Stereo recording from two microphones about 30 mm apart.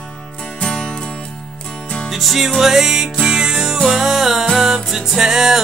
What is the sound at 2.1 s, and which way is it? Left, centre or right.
Music, centre.